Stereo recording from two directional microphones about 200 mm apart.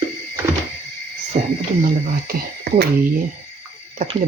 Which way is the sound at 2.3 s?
45° right (ahead or behind).